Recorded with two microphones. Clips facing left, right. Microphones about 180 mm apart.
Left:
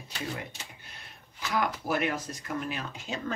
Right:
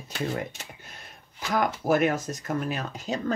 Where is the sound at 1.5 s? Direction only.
45° right (ahead or behind).